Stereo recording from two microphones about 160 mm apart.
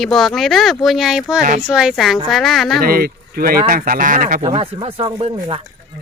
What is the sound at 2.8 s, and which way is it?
A man's voice, 65° right (ahead or behind).